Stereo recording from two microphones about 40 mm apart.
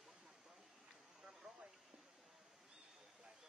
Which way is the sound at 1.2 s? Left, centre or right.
Centre.